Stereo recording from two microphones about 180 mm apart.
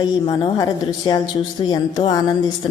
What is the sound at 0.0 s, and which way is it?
A woman's voice, 20° left (ahead or behind).